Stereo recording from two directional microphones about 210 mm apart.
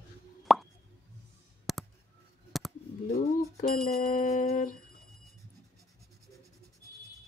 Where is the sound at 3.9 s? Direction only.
40° left (ahead or behind).